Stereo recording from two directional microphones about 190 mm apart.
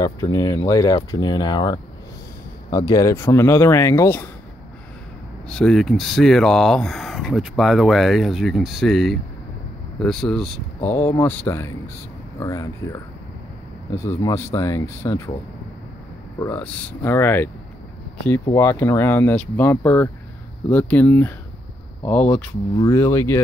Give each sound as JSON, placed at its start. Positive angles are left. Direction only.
{"t": 0.0, "sound": "speech", "side_deg": 15}
{"t": 5.5, "sound": "speech", "side_deg": 5}
{"t": 16.3, "sound": "speech", "side_deg": 10}